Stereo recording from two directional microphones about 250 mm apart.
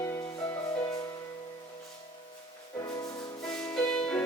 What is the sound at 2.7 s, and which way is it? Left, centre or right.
Music, centre.